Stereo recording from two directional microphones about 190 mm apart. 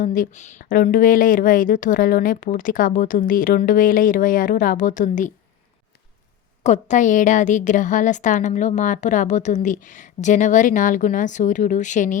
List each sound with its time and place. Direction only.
0.0 s a woman's voice: 45° left (ahead or behind)
6.6 s a woman's voice: 40° left (ahead or behind)